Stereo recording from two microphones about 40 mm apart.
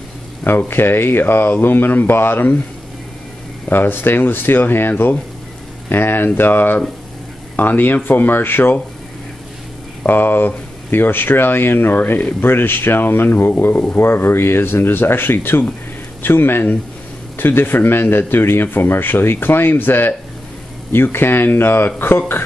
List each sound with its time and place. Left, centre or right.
0.4 s speech: left
3.7 s speech: left
10.0 s speech: left
13.9 s speech: left